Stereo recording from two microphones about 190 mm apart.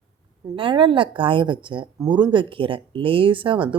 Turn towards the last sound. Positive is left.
turn(degrees=-25)  # may be behind; listen again after turning